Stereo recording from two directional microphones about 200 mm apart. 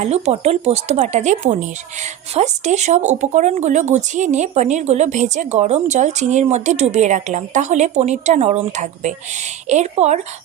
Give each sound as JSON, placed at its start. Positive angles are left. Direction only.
{"t": 0.0, "sound": "speech", "side_deg": -35}